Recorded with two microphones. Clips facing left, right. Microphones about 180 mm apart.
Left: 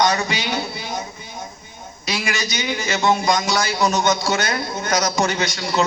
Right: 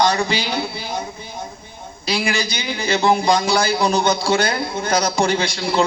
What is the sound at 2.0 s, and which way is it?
A man's voice, 30° right (ahead or behind).